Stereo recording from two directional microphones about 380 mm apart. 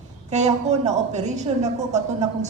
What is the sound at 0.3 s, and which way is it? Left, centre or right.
A woman's voice, centre.